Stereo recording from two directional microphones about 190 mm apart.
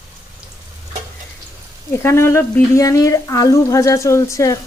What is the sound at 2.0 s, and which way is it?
Speech, 15° left (ahead or behind).